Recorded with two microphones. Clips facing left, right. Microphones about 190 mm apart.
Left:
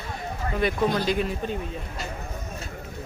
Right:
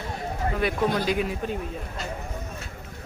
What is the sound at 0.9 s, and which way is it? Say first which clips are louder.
Speech: even; 10° right (ahead or behind).